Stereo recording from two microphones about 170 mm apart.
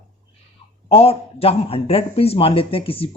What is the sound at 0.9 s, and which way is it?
A man's voice, 35° left (ahead or behind).